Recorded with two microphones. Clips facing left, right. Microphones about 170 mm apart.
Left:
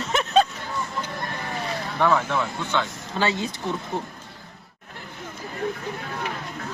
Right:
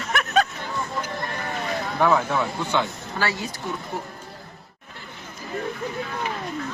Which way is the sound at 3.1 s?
20° left (ahead or behind).